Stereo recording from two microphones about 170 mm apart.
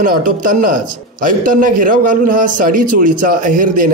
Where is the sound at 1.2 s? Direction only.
55° right (ahead or behind).